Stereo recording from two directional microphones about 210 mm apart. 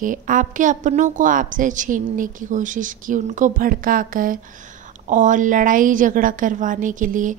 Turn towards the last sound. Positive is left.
turn(degrees=-40)  # may be behind; listen again after turning